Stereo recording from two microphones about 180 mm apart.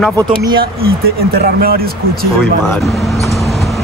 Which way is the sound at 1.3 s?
55° right (ahead or behind).